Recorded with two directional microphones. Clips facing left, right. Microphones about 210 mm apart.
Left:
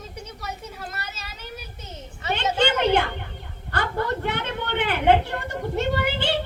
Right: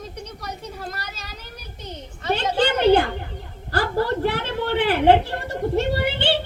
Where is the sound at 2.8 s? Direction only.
35° right (ahead or behind).